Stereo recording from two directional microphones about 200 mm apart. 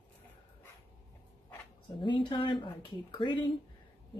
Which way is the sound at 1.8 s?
25° left (ahead or behind).